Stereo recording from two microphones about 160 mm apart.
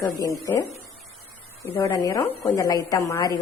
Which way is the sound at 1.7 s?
25° left (ahead or behind).